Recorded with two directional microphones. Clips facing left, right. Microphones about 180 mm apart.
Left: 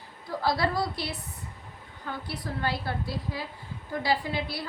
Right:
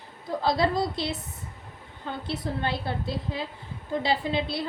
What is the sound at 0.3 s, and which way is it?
A woman's voice, 20° right (ahead or behind).